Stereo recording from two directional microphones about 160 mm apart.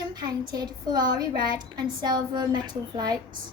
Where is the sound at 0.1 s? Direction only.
25° right (ahead or behind).